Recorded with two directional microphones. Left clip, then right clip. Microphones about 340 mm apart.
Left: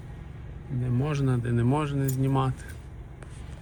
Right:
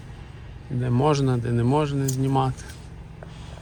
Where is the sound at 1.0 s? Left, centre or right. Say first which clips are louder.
Right 9 dB; centre.